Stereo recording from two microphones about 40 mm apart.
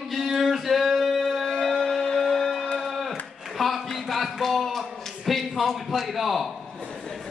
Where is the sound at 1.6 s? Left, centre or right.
Centre.